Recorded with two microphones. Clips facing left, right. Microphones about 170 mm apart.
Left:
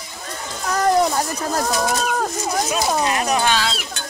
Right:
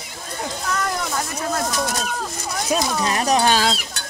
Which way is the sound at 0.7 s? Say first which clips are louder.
Left 9 dB; 35° left (ahead or behind).